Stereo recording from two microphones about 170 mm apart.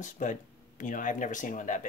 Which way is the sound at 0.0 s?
45° left (ahead or behind).